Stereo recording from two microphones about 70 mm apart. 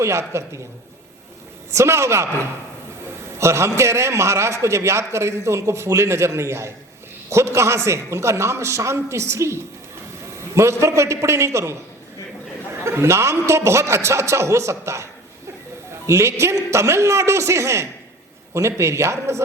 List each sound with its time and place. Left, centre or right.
0.0 s a man's voice: right
1.7 s a man's voice: right
12.8 s a man's voice: right
16.0 s a man's voice: right